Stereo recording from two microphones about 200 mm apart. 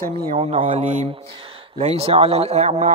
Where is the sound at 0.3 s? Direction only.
30° right (ahead or behind).